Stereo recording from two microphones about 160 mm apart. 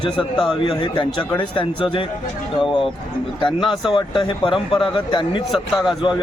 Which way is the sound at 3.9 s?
30° left (ahead or behind).